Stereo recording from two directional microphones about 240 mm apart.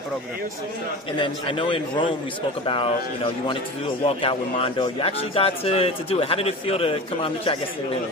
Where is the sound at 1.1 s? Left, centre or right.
Left.